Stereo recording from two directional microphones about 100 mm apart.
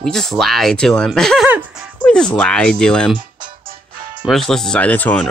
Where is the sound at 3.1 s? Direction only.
50° right (ahead or behind).